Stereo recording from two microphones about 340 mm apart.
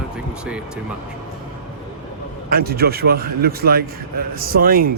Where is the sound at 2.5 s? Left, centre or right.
Right.